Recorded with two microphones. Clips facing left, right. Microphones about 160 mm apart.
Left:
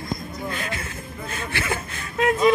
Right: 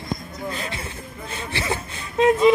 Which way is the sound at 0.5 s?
30° right (ahead or behind).